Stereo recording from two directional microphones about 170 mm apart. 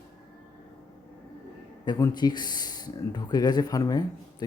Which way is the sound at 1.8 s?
20° left (ahead or behind).